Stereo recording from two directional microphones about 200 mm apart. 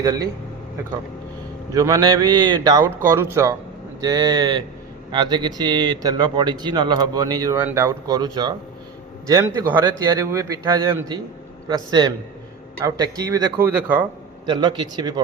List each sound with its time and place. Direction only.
0.0 s speech: 20° right (ahead or behind)
1.7 s a man's voice: 20° right (ahead or behind)
14.4 s a man's voice: 25° right (ahead or behind)